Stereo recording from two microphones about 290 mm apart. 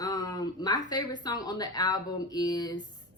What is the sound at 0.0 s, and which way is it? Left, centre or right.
A woman's voice, centre.